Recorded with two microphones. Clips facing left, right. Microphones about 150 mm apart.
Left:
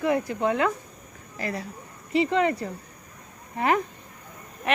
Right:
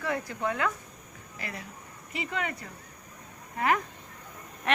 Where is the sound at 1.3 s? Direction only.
35° left (ahead or behind).